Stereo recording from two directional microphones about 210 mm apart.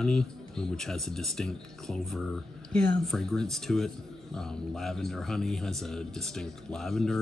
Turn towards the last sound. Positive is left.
turn(degrees=0)  # may be behind; listen again after turning